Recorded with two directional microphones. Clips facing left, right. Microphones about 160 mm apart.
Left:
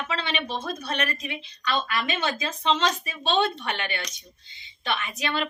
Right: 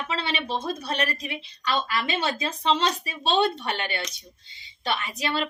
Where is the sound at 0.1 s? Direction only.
30° right (ahead or behind).